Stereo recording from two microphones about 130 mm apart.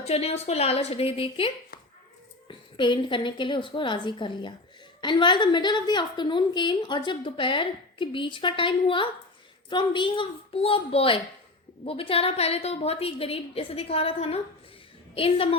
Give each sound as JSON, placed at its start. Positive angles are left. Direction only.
{"t": 0.0, "sound": "a woman's voice", "side_deg": 55}